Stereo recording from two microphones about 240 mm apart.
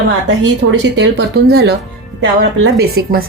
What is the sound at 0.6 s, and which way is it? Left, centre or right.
Speech, right.